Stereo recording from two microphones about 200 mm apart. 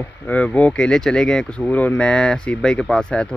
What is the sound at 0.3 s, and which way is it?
Speech, 5° left (ahead or behind).